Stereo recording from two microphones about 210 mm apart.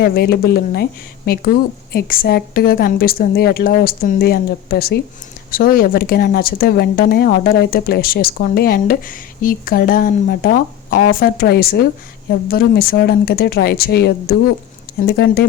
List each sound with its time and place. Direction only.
0.0 s speech: 50° left (ahead or behind)